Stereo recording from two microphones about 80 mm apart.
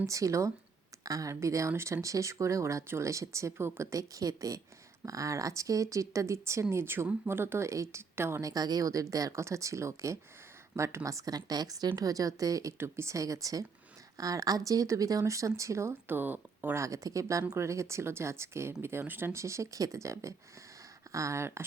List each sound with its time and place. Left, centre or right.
0.0 s speech: right
8.4 s speech: right
12.7 s speech: right
16.7 s speech: right